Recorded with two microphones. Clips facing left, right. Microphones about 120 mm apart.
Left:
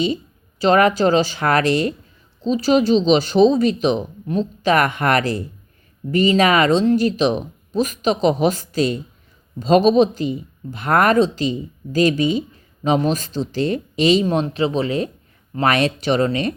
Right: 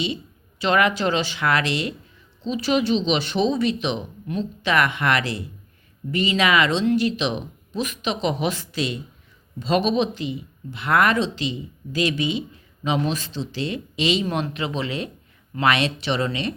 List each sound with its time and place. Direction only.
0.6 s speech: 40° left (ahead or behind)